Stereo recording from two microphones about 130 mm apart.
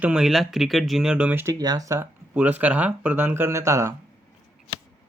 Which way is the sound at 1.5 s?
30° right (ahead or behind).